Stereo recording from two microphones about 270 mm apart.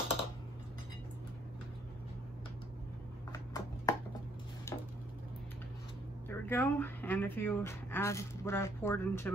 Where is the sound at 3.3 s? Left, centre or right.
Centre.